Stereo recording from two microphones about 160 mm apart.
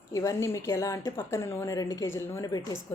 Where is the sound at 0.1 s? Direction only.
20° left (ahead or behind).